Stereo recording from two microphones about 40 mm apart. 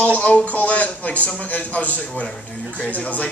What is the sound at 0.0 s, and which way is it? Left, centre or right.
A man's voice, left.